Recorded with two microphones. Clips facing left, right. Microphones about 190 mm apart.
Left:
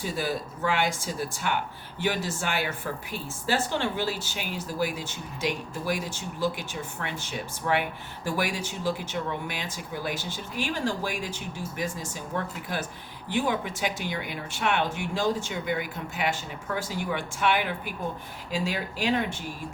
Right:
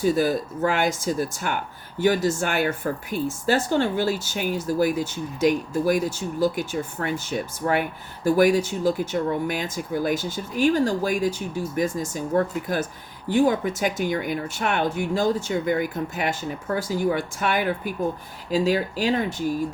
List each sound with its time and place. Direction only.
0.0 s speech: 45° right (ahead or behind)